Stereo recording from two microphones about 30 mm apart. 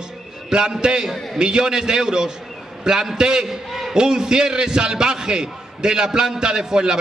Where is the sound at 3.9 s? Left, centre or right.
Right.